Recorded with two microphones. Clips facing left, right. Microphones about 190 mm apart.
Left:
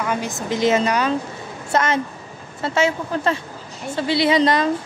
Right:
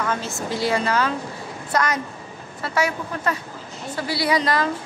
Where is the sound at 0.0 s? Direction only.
15° left (ahead or behind).